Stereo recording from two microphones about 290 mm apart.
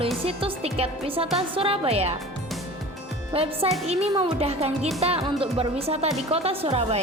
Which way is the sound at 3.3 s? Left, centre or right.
Centre.